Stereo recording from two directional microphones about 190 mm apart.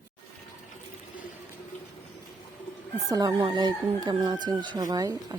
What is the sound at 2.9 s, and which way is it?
Speech, 20° right (ahead or behind).